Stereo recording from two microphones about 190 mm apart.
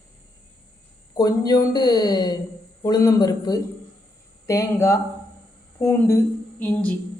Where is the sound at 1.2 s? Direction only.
20° left (ahead or behind).